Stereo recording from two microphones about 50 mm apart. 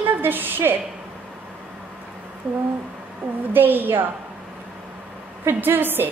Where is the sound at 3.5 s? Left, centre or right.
Right.